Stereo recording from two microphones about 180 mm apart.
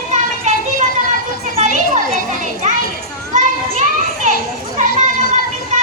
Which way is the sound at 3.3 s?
45° right (ahead or behind).